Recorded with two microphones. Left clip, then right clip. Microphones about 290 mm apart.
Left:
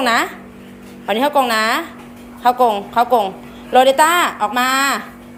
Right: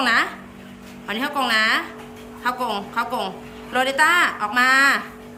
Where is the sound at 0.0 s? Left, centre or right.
Centre.